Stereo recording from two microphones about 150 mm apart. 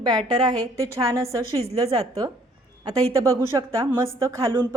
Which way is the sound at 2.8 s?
20° right (ahead or behind).